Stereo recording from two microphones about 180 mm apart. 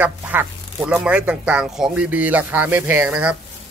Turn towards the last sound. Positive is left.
turn(degrees=-5)  # may be behind; listen again after turning